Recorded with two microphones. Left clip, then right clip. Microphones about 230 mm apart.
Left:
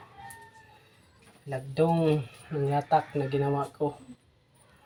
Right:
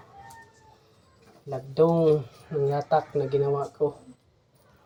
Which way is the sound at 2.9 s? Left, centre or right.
Centre.